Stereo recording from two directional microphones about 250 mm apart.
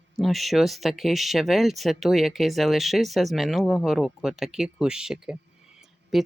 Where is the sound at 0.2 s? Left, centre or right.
Centre.